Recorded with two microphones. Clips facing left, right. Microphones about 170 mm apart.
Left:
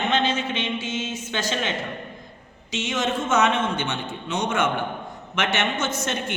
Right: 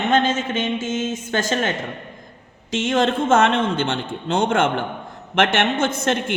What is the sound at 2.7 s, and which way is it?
Speech, 50° right (ahead or behind).